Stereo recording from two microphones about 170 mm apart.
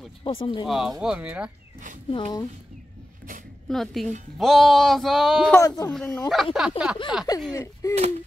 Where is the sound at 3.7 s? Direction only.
Centre (ahead or behind).